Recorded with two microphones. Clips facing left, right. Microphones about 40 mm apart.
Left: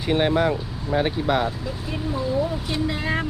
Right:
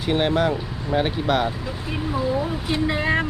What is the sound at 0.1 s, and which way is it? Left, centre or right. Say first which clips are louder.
Speech: even; centre.